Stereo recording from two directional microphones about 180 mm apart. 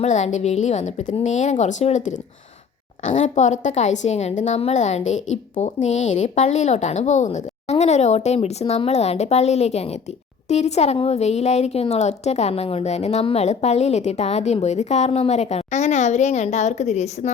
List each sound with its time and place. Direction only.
0.0 s a woman's voice: 40° left (ahead or behind)